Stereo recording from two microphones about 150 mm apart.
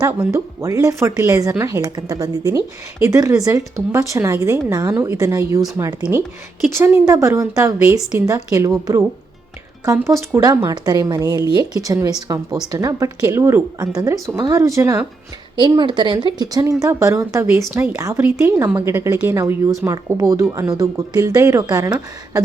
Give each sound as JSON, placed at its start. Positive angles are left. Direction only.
{"t": 0.0, "sound": "speech", "side_deg": -20}
{"t": 9.8, "sound": "speech", "side_deg": -20}